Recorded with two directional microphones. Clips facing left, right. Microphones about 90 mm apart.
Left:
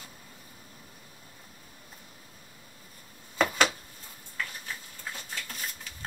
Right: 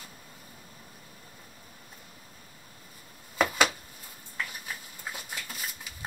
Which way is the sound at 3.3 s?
Centre (ahead or behind).